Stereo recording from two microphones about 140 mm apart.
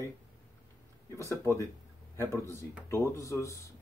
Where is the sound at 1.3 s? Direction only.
20° left (ahead or behind).